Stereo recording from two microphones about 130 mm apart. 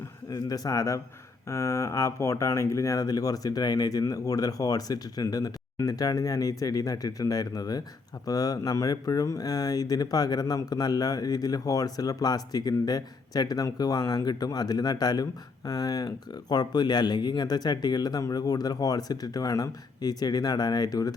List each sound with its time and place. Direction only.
0.3 s speech: 30° left (ahead or behind)